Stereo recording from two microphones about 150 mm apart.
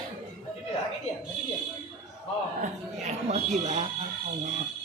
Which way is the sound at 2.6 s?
50° right (ahead or behind).